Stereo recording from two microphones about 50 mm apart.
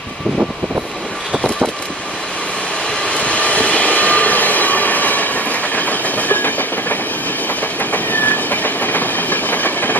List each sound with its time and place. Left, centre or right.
3.1 s train: left